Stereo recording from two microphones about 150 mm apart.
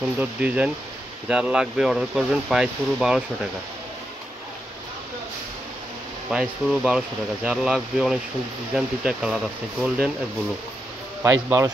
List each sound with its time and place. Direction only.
0.2 s a man's voice: 10° right (ahead or behind)
6.3 s speech: 5° right (ahead or behind)
11.2 s a man's voice: 15° right (ahead or behind)